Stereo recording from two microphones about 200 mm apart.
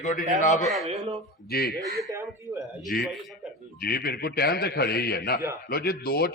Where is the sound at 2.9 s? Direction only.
45° left (ahead or behind).